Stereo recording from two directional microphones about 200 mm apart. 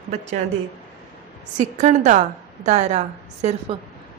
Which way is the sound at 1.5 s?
35° right (ahead or behind).